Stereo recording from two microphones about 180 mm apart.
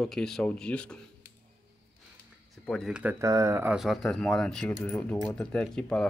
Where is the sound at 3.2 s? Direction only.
20° right (ahead or behind).